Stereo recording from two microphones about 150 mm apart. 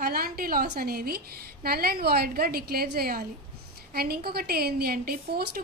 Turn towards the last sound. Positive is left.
turn(degrees=-90)